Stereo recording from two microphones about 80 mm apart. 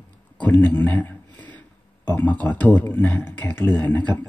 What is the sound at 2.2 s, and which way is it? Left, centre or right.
Speech, centre.